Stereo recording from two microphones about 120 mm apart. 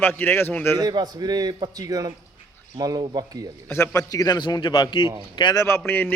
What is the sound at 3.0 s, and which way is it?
Speech, 45° right (ahead or behind).